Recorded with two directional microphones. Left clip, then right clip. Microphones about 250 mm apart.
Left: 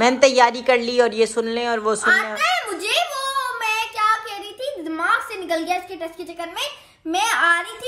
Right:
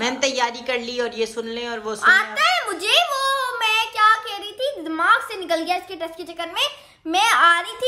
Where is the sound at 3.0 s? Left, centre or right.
Right.